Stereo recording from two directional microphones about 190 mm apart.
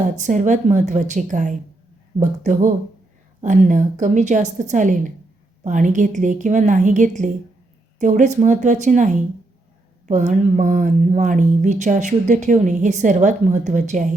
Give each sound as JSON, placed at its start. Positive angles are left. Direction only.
{"t": 0.2, "sound": "speech", "side_deg": -40}